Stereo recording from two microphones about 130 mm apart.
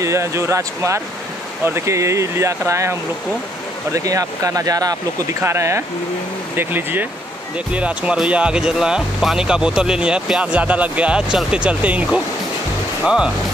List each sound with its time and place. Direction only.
0.0 s speech: 20° right (ahead or behind); by 13.3 s 5° right (ahead or behind)